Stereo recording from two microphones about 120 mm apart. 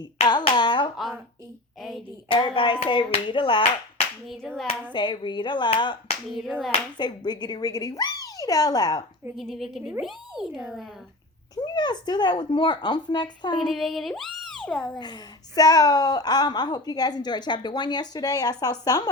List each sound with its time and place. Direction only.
0.3 s a sound: 40° left (ahead or behind)
2.3 s speech: 45° left (ahead or behind)
4.3 s speech: centre (ahead or behind)
4.9 s a woman's voice: 40° left (ahead or behind)
9.3 s speech: centre (ahead or behind)
11.5 s a woman's voice: 35° left (ahead or behind)
13.6 s a child's voice: centre (ahead or behind)
14.9 s a woman's voice: 35° left (ahead or behind)